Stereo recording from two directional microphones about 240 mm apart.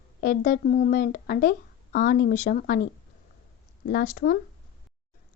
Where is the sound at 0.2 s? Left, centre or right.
Left.